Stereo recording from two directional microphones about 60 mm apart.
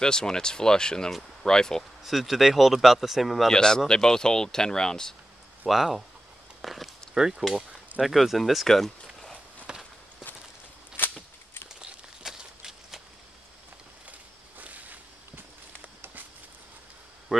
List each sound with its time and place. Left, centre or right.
0.0 s speech: centre
2.0 s speech: centre
5.7 s speech: centre
9.0 s a sound: centre
9.7 s walk: centre
11.8 s a sound: centre
14.6 s walk: right
17.3 s speech: centre